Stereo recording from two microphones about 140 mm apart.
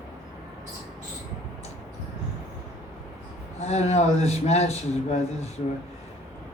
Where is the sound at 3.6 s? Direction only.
50° left (ahead or behind).